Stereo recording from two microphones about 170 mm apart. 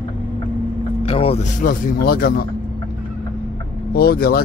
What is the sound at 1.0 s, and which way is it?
Speech, 35° left (ahead or behind).